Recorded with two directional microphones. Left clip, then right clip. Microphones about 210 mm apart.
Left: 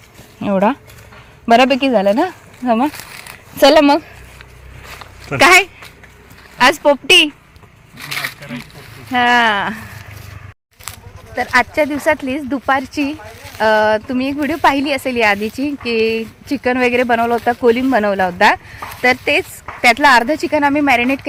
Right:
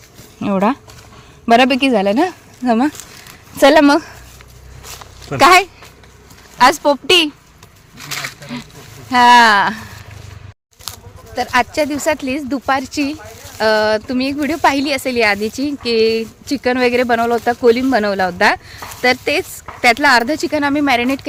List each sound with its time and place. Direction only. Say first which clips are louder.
0.3 s speech: left 1 dB; centre (ahead or behind)
5.3 s speech: even; centre (ahead or behind)
7.9 s a sound: left 2 dB; 20° left (ahead or behind)
9.1 s speech: right 5 dB; 5° right (ahead or behind)
11.3 s speech: left 1 dB; 5° left (ahead or behind)